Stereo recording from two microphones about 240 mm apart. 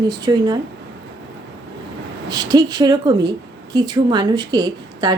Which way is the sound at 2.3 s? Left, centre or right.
Centre.